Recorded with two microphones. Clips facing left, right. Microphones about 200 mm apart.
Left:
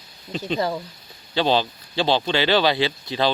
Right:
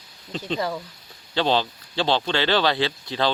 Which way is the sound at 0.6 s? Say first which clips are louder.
Left 4 dB; 30° left (ahead or behind).